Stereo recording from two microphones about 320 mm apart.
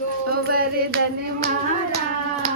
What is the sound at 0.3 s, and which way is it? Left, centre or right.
Music, right.